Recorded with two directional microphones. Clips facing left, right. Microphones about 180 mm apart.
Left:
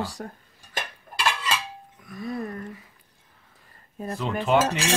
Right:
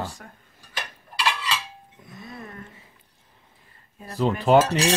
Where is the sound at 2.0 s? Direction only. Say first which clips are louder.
Left 9 dB; 25° right (ahead or behind).